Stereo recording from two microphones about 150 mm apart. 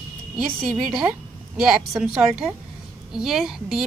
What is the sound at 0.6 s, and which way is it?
A woman's voice, centre (ahead or behind).